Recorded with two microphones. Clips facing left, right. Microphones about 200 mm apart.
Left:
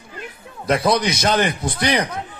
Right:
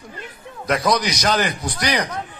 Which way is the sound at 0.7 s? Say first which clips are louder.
Left 2 dB; 25° left (ahead or behind).